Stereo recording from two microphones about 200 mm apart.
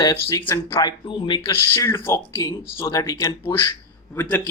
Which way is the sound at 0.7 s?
25° left (ahead or behind).